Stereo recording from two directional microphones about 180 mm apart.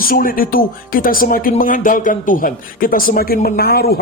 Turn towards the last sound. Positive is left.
turn(degrees=60)  # may be behind; listen again after turning